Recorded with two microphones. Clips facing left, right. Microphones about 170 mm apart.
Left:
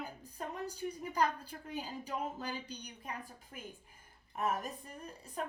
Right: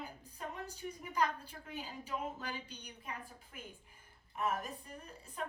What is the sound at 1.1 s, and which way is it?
A woman's voice, 40° left (ahead or behind).